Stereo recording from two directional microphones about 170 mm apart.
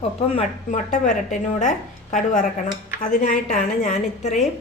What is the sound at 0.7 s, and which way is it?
A woman's voice, 45° left (ahead or behind).